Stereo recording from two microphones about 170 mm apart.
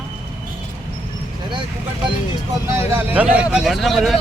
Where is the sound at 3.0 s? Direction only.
10° right (ahead or behind).